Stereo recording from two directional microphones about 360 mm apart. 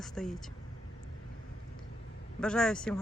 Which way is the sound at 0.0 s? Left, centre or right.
Centre.